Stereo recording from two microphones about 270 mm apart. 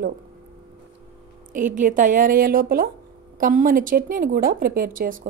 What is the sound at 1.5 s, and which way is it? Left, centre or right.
A woman's voice, right.